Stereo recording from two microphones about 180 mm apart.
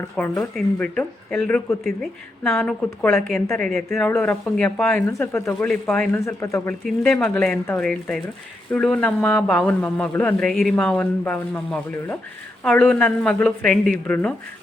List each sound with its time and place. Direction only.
0.2 s speech: 5° left (ahead or behind)
6.1 s speech: 15° left (ahead or behind)
6.8 s speech: 5° left (ahead or behind)
10.5 s speech: centre (ahead or behind)